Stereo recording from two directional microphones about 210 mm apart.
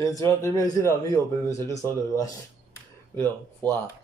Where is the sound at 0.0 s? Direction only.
15° left (ahead or behind).